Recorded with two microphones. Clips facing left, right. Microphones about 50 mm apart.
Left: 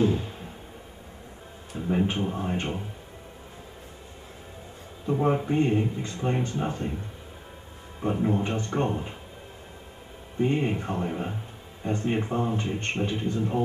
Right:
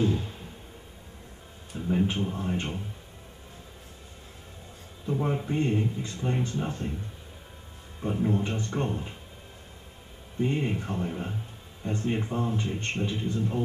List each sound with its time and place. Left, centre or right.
0.0 s a sound: centre
1.9 s a man's voice: centre
5.0 s a man's voice: centre
8.0 s a man's voice: centre
10.4 s a man's voice: centre